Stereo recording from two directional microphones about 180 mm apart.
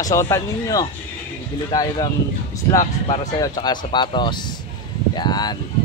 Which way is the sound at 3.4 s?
25° left (ahead or behind).